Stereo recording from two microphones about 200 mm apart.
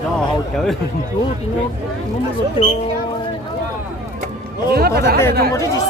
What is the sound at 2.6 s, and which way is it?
Speech, 25° left (ahead or behind).